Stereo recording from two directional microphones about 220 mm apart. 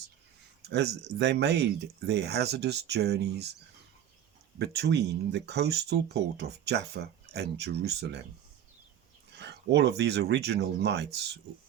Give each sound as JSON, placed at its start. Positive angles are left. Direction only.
{"t": 1.2, "sound": "speech", "side_deg": -50}
{"t": 4.5, "sound": "speech", "side_deg": -50}
{"t": 9.3, "sound": "a sound", "side_deg": -50}
{"t": 10.0, "sound": "speech", "side_deg": -50}